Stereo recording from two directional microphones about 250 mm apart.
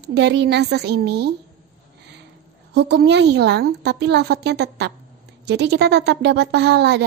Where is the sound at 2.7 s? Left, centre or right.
Right.